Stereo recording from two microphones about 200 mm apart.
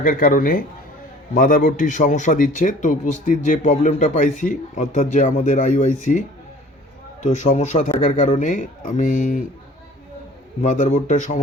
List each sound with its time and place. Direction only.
0.0 s a man's voice: 45° left (ahead or behind)
10.6 s a man's voice: 35° left (ahead or behind)